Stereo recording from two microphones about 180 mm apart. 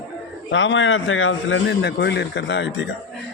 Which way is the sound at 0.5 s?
90° left.